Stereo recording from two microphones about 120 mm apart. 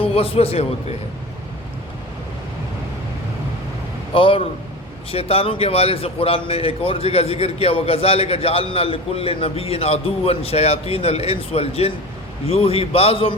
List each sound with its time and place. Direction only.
0.0 s a man's voice: 55° left (ahead or behind)
4.1 s a man's voice: 50° left (ahead or behind)